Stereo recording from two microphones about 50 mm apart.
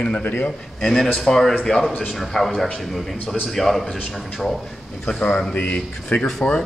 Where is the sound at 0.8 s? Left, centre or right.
Centre.